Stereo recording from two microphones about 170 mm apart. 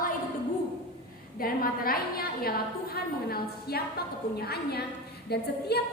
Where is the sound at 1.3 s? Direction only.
60° left (ahead or behind).